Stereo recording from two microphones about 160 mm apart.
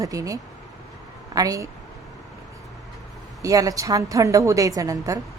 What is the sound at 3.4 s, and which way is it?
Speech, 20° right (ahead or behind).